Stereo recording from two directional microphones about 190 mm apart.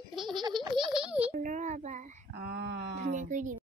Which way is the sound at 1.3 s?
40° right (ahead or behind).